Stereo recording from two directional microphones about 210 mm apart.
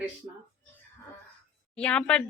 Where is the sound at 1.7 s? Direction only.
5° left (ahead or behind).